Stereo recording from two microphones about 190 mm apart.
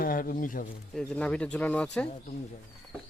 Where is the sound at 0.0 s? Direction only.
50° left (ahead or behind).